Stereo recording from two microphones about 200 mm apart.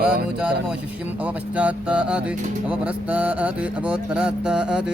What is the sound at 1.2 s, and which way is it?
Speech, 5° right (ahead or behind).